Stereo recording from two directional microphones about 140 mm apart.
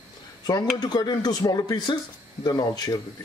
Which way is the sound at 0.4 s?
25° left (ahead or behind).